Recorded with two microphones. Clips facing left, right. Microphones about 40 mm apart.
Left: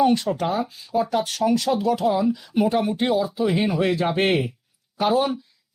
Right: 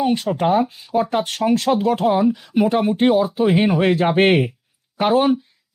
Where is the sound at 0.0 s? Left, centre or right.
Right.